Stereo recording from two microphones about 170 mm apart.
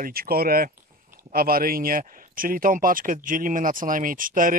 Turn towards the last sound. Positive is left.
turn(degrees=-55)  # may be behind; listen again after turning